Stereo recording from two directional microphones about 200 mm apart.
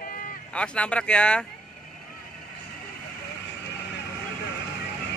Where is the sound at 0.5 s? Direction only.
5° left (ahead or behind).